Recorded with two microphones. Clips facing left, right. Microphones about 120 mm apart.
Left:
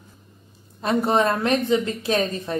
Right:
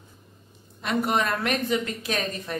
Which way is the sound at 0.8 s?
30° left (ahead or behind).